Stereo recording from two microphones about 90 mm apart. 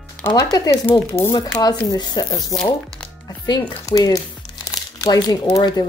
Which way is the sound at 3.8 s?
40° left (ahead or behind).